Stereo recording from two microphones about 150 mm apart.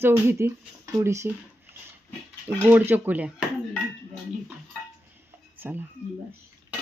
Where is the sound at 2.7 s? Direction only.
10° right (ahead or behind).